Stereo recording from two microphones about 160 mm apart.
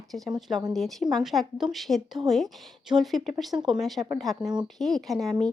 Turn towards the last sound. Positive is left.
turn(degrees=0)  # may be behind; listen again after turning